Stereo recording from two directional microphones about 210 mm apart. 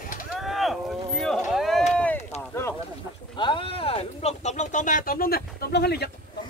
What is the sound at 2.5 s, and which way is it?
Speech, 10° left (ahead or behind).